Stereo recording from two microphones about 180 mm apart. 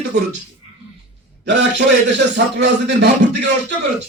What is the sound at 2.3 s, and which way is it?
Speech, 70° right (ahead or behind).